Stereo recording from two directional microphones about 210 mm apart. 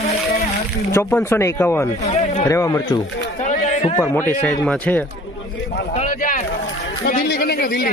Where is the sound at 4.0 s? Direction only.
10° left (ahead or behind).